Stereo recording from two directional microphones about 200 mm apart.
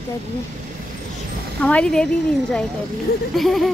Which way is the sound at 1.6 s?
5° left (ahead or behind).